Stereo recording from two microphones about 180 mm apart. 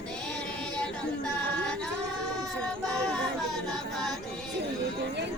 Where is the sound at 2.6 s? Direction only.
5° left (ahead or behind).